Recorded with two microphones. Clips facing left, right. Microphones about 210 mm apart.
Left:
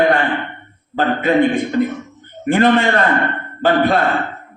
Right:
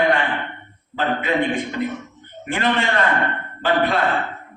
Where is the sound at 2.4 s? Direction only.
40° left (ahead or behind).